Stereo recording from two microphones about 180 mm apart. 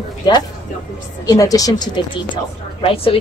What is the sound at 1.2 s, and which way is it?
Speech, 20° left (ahead or behind).